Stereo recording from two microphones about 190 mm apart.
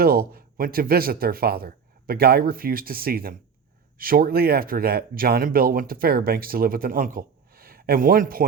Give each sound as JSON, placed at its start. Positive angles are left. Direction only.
{"t": 0.0, "sound": "speech", "side_deg": -50}